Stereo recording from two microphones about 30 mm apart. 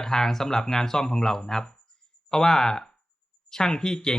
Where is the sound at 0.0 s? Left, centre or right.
Centre.